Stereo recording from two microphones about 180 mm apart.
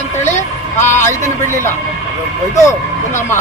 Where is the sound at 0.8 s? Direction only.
45° left (ahead or behind).